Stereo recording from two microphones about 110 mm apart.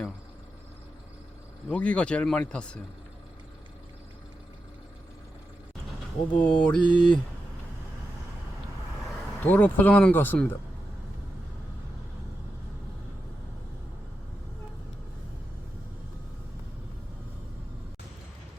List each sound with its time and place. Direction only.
1.7 s speech: 10° left (ahead or behind)
6.3 s speech: 10° left (ahead or behind)
9.4 s speech: 15° left (ahead or behind)